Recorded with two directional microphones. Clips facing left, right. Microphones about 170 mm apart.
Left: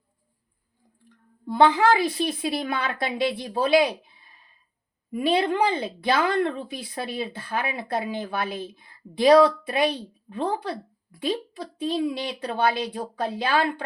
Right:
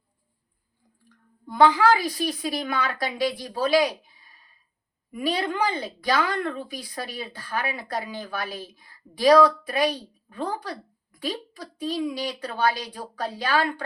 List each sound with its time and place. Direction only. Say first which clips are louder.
1.5 s speech: even; 25° left (ahead or behind)